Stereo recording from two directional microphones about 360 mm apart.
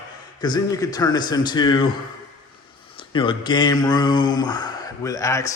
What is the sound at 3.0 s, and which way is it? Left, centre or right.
Speech, centre.